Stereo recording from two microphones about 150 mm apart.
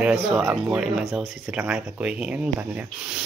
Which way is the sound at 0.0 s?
Centre (ahead or behind).